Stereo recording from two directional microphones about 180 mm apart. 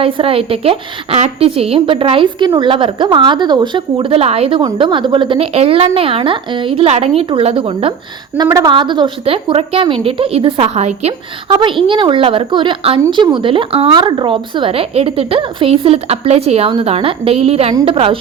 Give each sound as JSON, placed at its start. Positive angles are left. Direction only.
{"t": 0.0, "sound": "a woman's voice", "side_deg": -30}